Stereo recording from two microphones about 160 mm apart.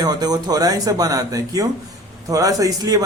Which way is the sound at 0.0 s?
25° right (ahead or behind).